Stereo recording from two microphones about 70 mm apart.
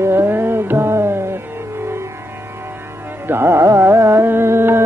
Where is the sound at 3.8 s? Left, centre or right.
Right.